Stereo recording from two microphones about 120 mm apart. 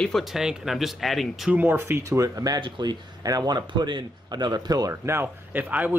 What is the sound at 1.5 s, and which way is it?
Speech, 20° right (ahead or behind).